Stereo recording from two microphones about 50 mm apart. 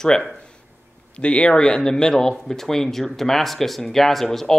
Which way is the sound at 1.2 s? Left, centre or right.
Left.